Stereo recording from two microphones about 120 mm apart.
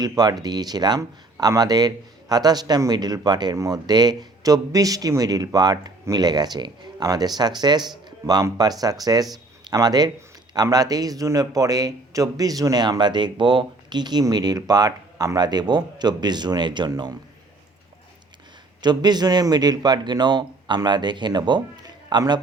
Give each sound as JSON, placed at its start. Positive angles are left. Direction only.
{"t": 0.0, "sound": "speech", "side_deg": -35}
{"t": 18.8, "sound": "speech", "side_deg": -35}